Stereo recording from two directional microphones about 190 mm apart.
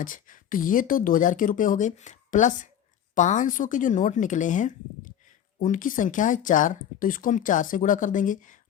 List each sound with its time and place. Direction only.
0.0 s a woman's voice: 45° left (ahead or behind)